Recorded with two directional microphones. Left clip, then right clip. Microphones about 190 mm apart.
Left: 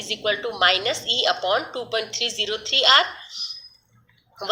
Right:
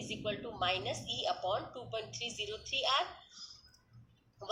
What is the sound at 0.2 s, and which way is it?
A woman's voice, 45° left (ahead or behind).